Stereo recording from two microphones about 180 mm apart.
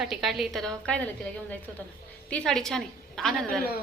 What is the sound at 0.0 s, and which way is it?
A woman's voice, centre (ahead or behind).